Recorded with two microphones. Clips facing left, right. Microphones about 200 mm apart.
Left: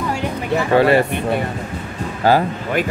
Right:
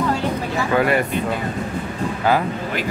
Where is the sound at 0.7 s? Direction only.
30° left (ahead or behind).